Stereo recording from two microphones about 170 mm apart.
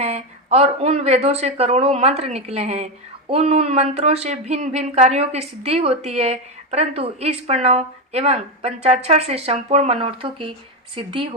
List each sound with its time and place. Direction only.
0.0 s speech: 40° right (ahead or behind)